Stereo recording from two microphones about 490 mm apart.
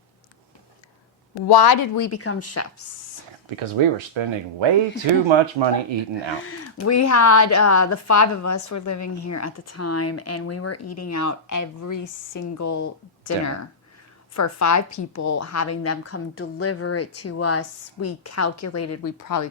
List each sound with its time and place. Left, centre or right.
1.5 s speech: left
2.1 s speech: left
3.5 s speech: right
6.4 s speech: left